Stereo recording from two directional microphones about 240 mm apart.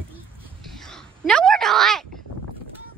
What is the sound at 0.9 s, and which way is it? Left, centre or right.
A woman's voice, centre.